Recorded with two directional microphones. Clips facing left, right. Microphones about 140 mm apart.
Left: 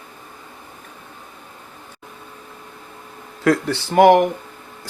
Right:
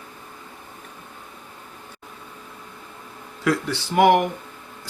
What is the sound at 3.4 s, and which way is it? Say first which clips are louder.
Speech: left 5 dB; 50° left (ahead or behind).